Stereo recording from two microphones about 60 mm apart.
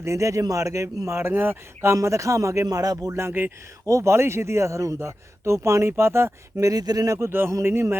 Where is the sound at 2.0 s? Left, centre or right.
Right.